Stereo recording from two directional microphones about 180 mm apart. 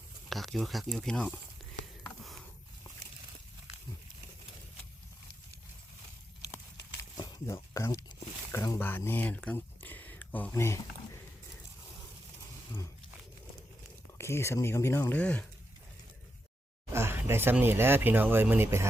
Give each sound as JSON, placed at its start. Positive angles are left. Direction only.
{"t": 0.3, "sound": "speech", "side_deg": 0}
{"t": 7.2, "sound": "a sound", "side_deg": 20}
{"t": 14.2, "sound": "speech", "side_deg": 15}
{"t": 16.9, "sound": "speech", "side_deg": -15}